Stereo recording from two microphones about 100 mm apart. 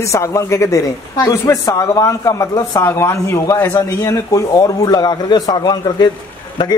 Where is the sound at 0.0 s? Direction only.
30° left (ahead or behind).